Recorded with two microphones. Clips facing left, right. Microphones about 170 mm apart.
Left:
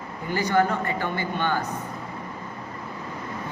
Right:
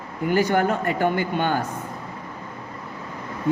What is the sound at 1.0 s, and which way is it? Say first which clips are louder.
Speech: right 5 dB; 50° right (ahead or behind).